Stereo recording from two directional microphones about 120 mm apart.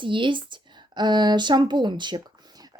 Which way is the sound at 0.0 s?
45° right (ahead or behind).